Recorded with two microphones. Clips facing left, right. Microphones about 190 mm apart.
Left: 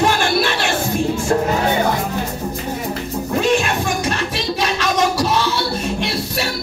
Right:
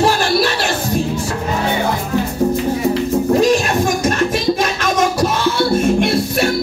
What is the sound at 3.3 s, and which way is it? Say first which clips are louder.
Music: right 1 dB; 40° right (ahead or behind).